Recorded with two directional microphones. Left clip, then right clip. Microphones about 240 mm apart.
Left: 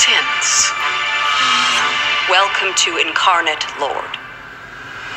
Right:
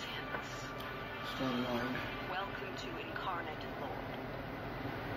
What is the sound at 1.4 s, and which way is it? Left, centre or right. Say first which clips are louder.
Speech: left 19 dB; left.